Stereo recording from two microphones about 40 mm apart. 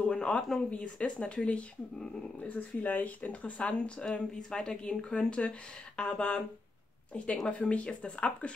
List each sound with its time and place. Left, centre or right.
0.0 s a sound: left
0.6 s speech: left
7.5 s speech: left